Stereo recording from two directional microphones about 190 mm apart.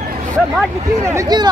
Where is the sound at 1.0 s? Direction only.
15° right (ahead or behind).